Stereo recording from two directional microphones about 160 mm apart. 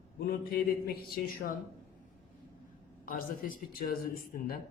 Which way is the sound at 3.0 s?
60° left (ahead or behind).